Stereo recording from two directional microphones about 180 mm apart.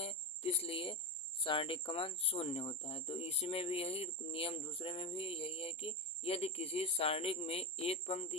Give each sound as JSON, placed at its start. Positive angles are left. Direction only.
{"t": 0.0, "sound": "cricket", "side_deg": 35}
{"t": 1.5, "sound": "speech", "side_deg": 30}